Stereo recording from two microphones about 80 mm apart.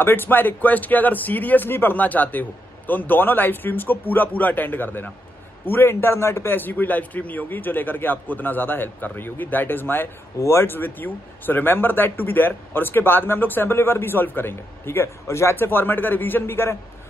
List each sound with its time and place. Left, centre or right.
0.0 s speech: left